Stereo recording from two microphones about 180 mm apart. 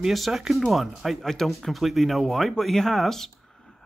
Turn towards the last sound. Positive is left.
turn(degrees=0)  # may be behind; listen again after turning